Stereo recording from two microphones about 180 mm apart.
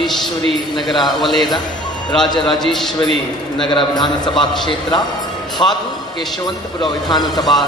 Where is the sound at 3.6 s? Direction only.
25° left (ahead or behind).